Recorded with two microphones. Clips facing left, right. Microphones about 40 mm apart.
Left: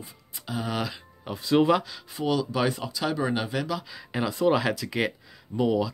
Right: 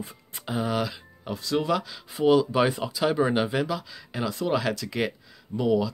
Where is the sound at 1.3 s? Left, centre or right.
Left.